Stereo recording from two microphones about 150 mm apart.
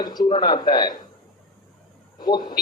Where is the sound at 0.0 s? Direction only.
30° left (ahead or behind).